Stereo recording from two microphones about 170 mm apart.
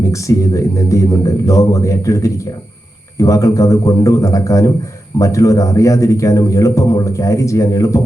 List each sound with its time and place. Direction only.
0.1 s a man's voice: 20° left (ahead or behind)